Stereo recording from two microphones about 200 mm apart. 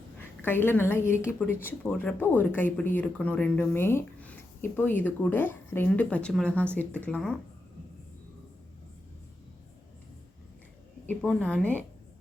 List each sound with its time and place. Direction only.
0.2 s a woman's voice: 10° left (ahead or behind)
11.1 s a woman's voice: 5° left (ahead or behind)